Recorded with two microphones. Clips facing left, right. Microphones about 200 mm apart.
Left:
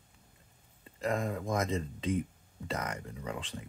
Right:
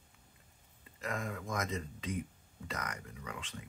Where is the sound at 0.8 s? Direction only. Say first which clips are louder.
Left 7 dB; 30° left (ahead or behind).